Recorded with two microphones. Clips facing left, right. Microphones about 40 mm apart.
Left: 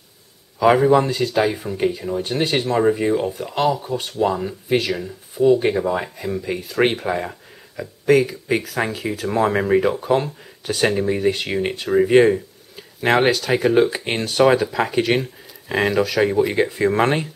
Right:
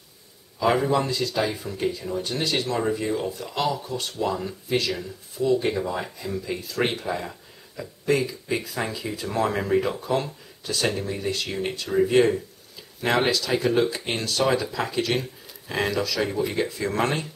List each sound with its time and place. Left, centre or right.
0.8 s speech: left
4.2 s speech: left
8.1 s speech: left